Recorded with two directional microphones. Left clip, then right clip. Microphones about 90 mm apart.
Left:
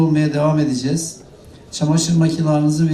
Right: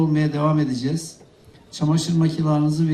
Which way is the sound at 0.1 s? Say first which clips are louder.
Left 4 dB; 25° left (ahead or behind).